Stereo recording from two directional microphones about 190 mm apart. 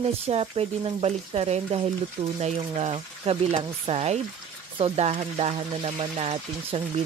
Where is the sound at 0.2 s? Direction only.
30° right (ahead or behind).